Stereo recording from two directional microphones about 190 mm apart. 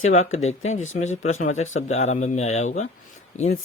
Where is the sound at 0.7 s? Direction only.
40° left (ahead or behind).